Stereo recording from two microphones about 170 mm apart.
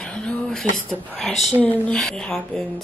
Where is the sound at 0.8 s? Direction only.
5° left (ahead or behind).